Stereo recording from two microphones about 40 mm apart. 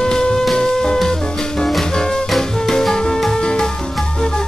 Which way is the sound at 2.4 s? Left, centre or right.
Centre.